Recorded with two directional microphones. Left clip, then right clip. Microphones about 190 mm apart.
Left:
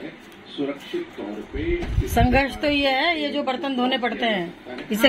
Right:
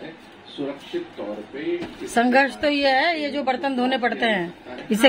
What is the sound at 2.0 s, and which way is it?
A woman's voice, 10° right (ahead or behind).